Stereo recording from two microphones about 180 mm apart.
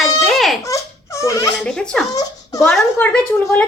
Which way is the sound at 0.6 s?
15° left (ahead or behind).